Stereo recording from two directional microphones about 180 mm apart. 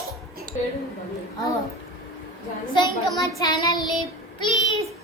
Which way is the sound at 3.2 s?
20° left (ahead or behind).